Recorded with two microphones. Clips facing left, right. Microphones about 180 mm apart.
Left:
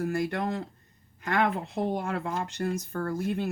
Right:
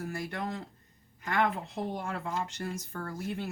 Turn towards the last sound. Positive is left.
turn(degrees=50)  # may be behind; listen again after turning